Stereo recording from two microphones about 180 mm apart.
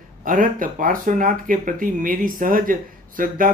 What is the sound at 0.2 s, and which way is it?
Speech, 50° right (ahead or behind).